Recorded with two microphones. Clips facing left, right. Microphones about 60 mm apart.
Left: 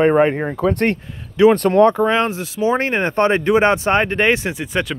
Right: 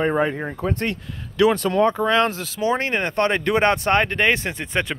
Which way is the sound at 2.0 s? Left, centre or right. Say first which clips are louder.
Left 2 dB; centre.